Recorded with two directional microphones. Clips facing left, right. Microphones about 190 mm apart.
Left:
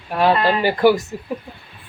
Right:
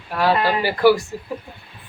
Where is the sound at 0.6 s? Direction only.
20° left (ahead or behind).